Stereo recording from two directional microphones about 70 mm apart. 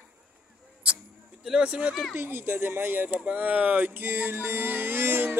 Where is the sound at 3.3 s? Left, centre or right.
Right.